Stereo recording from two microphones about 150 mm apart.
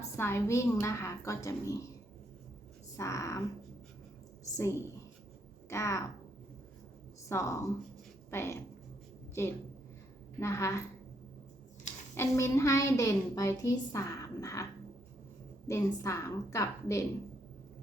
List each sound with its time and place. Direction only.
0.2 s a woman's voice: 15° left (ahead or behind)
2.9 s a woman's voice: 20° left (ahead or behind)
4.5 s a woman's voice: 20° left (ahead or behind)
7.3 s a woman's voice: 20° left (ahead or behind)
12.1 s a woman's voice: 20° left (ahead or behind)